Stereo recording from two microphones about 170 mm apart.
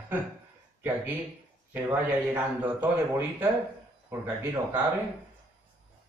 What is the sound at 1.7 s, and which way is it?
A man's voice, 10° right (ahead or behind).